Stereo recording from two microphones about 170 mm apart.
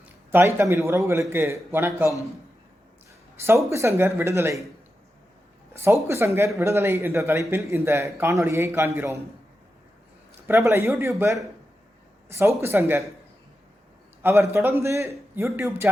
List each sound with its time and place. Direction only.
0.0 s a man's voice: 15° right (ahead or behind)
3.4 s a man's voice: 15° right (ahead or behind)
5.7 s a man's voice: 15° right (ahead or behind)
10.4 s a man's voice: 15° right (ahead or behind)
14.2 s a man's voice: 15° right (ahead or behind)